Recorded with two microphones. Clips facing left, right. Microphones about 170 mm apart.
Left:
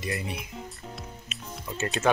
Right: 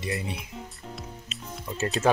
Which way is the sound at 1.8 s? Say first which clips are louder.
Right 2 dB; 35° right (ahead or behind).